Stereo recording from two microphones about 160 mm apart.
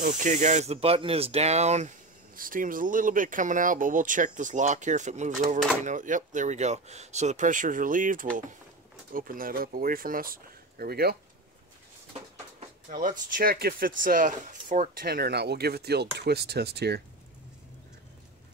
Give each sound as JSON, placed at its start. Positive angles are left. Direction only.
{"t": 0.0, "sound": "speech", "side_deg": -50}
{"t": 13.4, "sound": "speech", "side_deg": -70}